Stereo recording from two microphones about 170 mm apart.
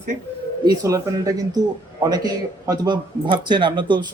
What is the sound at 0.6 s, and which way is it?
Speech, 20° right (ahead or behind).